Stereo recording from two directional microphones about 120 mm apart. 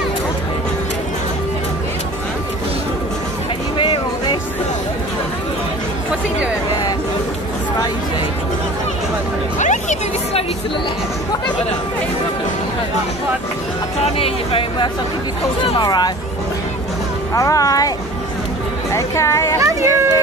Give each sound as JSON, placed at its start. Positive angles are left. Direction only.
{"t": 3.7, "sound": "music", "side_deg": 45}
{"t": 9.6, "sound": "hubbub", "side_deg": 85}
{"t": 14.0, "sound": "a sound", "side_deg": 55}
{"t": 15.8, "sound": "music", "side_deg": 35}
{"t": 17.3, "sound": "music", "side_deg": 30}
{"t": 18.9, "sound": "music", "side_deg": 25}
{"t": 19.6, "sound": "a sound", "side_deg": -25}